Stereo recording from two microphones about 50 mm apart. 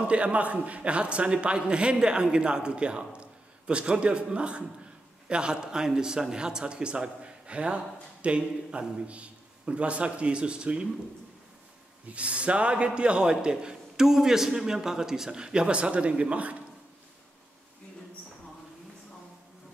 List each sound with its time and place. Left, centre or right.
0.0 s a man's voice: right
12.1 s a man's voice: right